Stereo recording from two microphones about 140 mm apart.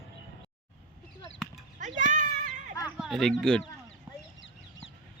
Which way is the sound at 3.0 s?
Centre (ahead or behind).